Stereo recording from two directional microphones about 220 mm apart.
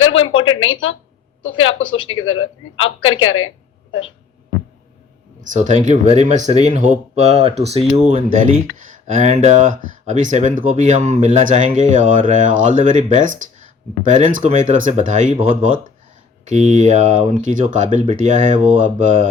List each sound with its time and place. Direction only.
0.0 s a sound: 65° left (ahead or behind)
1.5 s a woman's voice: 65° left (ahead or behind)
5.4 s speech: 35° right (ahead or behind)
8.8 s speech: 35° right (ahead or behind)
16.5 s speech: 30° right (ahead or behind)